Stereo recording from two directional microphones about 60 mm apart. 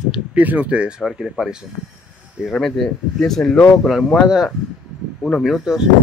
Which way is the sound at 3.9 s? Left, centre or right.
Centre.